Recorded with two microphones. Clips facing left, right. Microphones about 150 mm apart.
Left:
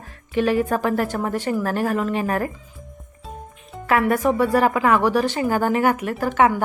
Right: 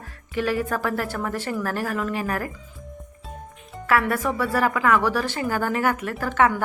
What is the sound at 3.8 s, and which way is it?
A woman's voice, 20° left (ahead or behind).